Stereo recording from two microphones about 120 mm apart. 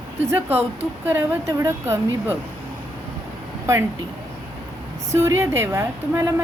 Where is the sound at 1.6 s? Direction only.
25° right (ahead or behind).